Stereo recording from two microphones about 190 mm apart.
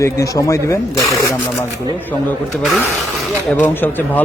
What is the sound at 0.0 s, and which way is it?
Speech, 15° left (ahead or behind).